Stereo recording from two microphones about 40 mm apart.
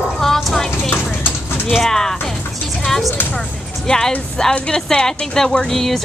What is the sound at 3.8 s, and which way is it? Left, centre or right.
Speech, centre.